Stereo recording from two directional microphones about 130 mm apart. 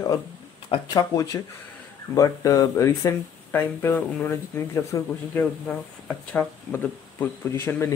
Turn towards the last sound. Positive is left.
turn(degrees=20)  # may be behind; listen again after turning